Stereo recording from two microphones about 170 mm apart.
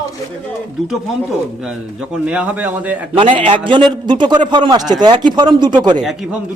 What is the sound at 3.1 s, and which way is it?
A man's voice, 30° right (ahead or behind).